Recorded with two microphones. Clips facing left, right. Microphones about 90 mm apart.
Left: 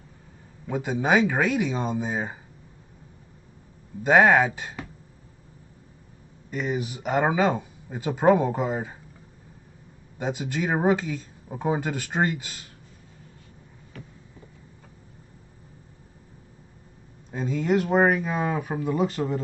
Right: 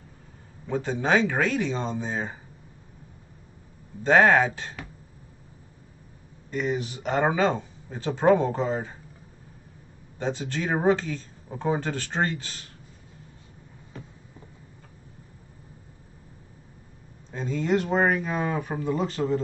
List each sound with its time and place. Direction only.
0.7 s speech: 10° left (ahead or behind)
4.0 s speech: 10° left (ahead or behind)
6.5 s speech: 10° left (ahead or behind)
10.1 s speech: 10° left (ahead or behind)
13.9 s a sound: 25° right (ahead or behind)
17.3 s speech: 5° left (ahead or behind)